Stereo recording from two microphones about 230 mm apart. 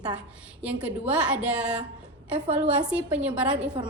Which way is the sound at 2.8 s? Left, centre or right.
Centre.